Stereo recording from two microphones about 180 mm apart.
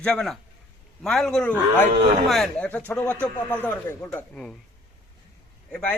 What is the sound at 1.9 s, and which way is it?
Speech, 25° right (ahead or behind).